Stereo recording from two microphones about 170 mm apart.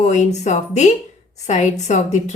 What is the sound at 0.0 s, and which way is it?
A woman's voice, 45° left (ahead or behind).